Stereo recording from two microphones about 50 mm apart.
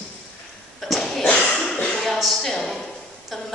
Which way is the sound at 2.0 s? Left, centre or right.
Centre.